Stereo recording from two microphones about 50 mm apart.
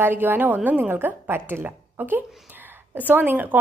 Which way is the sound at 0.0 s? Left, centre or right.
Right.